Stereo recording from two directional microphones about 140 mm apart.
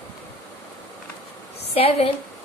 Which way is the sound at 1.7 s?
45° left (ahead or behind).